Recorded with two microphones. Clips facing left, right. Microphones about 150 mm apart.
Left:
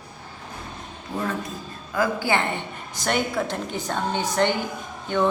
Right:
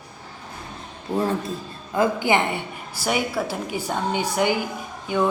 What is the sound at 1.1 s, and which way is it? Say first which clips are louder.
A woman's voice: right 5 dB; 30° right (ahead or behind).